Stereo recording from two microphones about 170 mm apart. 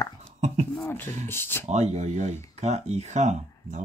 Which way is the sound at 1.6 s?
40° right (ahead or behind).